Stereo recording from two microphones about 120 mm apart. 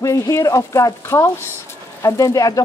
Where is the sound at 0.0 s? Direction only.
30° left (ahead or behind).